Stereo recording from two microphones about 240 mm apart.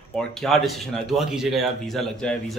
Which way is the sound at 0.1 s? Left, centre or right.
Centre.